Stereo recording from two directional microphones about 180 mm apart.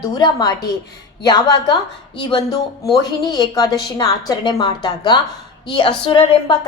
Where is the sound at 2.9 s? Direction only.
20° left (ahead or behind).